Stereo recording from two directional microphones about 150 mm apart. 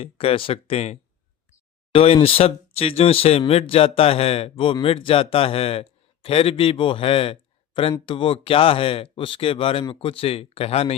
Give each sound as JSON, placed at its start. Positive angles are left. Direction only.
{"t": 0.0, "sound": "speech", "side_deg": 40}